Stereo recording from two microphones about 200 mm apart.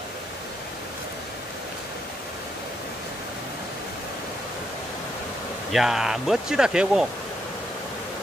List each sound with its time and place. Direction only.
5.7 s speech: centre (ahead or behind)